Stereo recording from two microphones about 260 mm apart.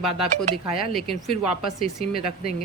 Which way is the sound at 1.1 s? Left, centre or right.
Centre.